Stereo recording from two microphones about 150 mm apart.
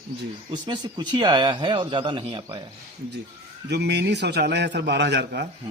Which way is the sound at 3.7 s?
90° right.